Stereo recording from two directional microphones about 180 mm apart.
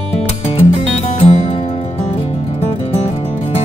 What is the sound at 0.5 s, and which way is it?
Music, 35° left (ahead or behind).